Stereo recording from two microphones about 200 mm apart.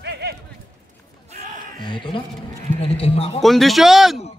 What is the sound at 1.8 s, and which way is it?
Speech, 25° left (ahead or behind).